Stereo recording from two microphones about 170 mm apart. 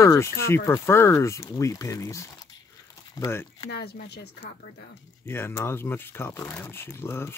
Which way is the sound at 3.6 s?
70° left (ahead or behind).